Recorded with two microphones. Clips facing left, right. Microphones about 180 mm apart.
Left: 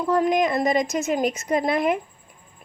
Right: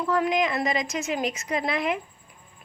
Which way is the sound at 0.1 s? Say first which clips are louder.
Left 4 dB; 45° left (ahead or behind).